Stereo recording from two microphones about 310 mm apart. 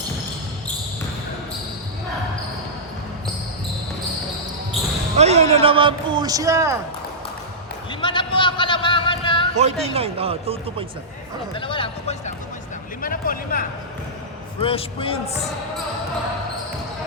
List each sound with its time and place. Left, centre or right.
5.1 s speech: right
8.0 s a sound: centre
9.6 s speech: centre
11.5 s a man's voice: centre